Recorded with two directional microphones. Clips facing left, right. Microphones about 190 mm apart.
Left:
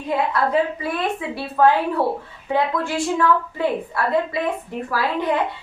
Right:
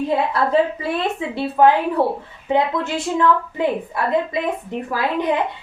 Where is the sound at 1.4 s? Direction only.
20° right (ahead or behind).